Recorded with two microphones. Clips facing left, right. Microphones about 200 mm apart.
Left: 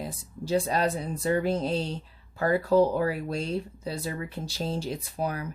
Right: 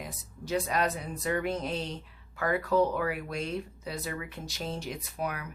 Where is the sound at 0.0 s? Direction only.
30° left (ahead or behind).